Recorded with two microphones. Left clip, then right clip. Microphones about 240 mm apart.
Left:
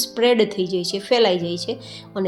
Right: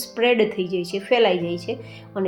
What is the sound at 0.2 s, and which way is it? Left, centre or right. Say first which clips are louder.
A woman's voice: left 1 dB; left.